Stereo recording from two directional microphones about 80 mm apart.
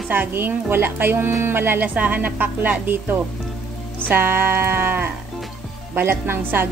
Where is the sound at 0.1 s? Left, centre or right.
Right.